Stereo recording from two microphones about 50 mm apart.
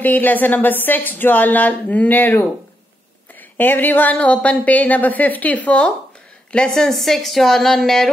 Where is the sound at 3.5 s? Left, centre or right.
Left.